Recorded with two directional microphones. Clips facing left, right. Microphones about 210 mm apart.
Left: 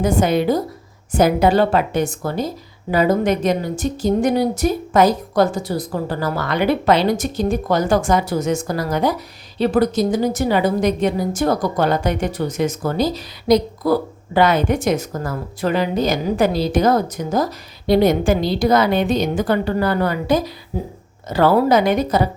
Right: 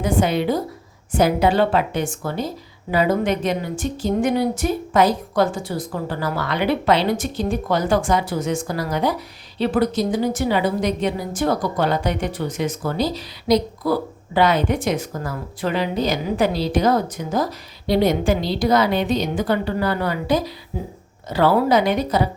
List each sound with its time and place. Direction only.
0.0 s a woman's voice: 45° left (ahead or behind)